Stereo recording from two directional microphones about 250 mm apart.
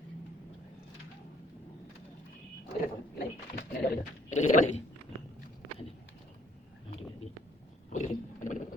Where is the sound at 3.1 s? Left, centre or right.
Left.